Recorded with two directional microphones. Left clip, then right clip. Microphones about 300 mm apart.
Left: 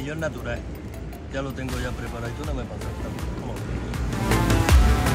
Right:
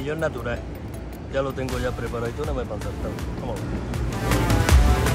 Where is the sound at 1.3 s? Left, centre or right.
Centre.